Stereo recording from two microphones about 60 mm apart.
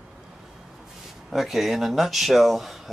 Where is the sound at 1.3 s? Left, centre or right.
Centre.